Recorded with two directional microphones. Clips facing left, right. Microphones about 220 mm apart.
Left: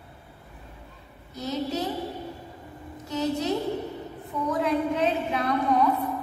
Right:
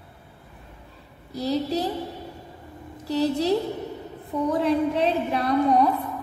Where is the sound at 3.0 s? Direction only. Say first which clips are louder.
Right 4 dB; 35° right (ahead or behind).